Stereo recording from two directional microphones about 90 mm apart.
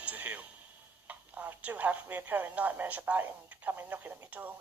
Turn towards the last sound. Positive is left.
turn(degrees=-20)  # may be behind; listen again after turning